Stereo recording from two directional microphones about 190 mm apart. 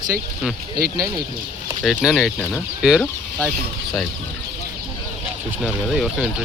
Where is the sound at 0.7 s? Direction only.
50° right (ahead or behind).